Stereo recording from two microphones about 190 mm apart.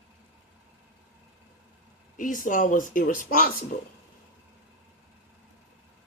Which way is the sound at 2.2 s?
45° left (ahead or behind).